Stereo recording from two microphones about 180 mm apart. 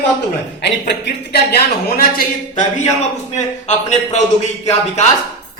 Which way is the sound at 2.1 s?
45° left (ahead or behind).